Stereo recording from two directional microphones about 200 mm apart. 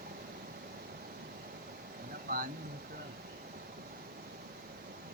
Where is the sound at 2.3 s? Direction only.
45° right (ahead or behind).